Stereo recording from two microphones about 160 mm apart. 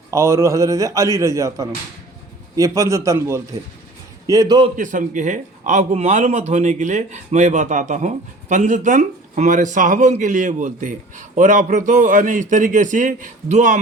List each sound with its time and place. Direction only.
0.1 s a man's voice: 20° right (ahead or behind)
4.8 s speech: 55° right (ahead or behind)